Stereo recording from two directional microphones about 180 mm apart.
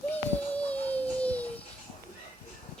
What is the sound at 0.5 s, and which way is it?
Music, 10° left (ahead or behind).